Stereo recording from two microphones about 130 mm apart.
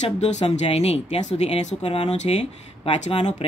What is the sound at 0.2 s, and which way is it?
Speech, 60° left (ahead or behind).